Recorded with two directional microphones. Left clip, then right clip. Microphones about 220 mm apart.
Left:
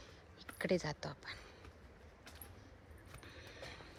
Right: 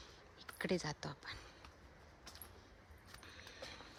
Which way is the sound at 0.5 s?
15° right (ahead or behind).